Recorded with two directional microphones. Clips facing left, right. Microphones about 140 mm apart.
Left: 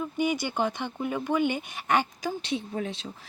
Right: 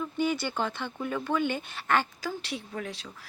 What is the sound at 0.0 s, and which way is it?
Speech, 15° left (ahead or behind).